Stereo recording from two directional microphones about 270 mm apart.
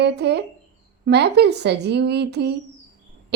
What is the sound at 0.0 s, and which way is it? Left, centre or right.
A woman's voice, right.